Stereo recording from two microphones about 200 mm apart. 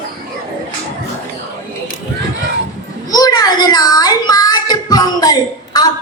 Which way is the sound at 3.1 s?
20° left (ahead or behind).